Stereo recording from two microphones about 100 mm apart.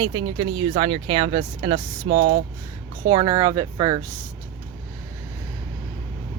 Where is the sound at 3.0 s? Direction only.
45° right (ahead or behind).